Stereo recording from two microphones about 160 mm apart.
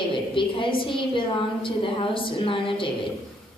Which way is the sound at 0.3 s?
30° left (ahead or behind).